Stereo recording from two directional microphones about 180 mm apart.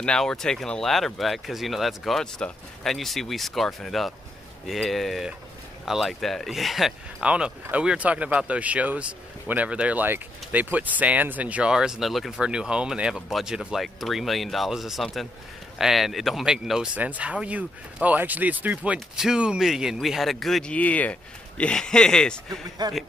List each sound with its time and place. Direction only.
0.0 s speech: 5° left (ahead or behind)
22.8 s speech: 25° right (ahead or behind)